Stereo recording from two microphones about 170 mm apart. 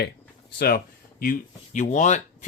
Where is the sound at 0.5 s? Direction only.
65° left (ahead or behind); by 2.2 s 45° left (ahead or behind).